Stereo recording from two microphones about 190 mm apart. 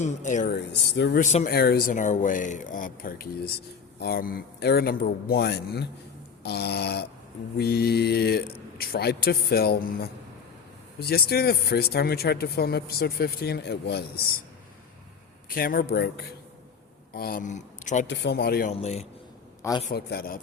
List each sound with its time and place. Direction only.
0.0 s speech: 40° left (ahead or behind)
0.5 s speech: 65° left (ahead or behind)
1.2 s speech: 35° left (ahead or behind)
1.5 s speech: 55° left (ahead or behind)
15.4 s speech: 50° left (ahead or behind)
18.1 s speech: 65° left (ahead or behind)
18.7 s speech: 35° left (ahead or behind)
19.9 s speech: 55° left (ahead or behind)